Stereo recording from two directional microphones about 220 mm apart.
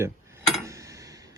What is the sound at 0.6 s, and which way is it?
Tick-tock, 15° right (ahead or behind).